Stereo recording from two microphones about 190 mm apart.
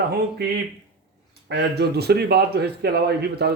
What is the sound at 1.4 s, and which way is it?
Speech, 60° right (ahead or behind).